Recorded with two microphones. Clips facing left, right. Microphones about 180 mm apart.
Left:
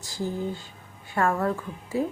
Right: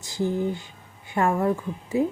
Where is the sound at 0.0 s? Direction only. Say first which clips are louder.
Right 5 dB; 20° right (ahead or behind).